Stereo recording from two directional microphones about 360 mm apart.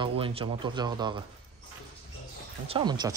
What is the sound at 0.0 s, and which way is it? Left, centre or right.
Speech, centre.